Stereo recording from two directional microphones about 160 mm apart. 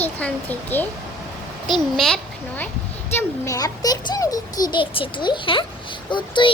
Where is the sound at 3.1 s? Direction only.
20° left (ahead or behind).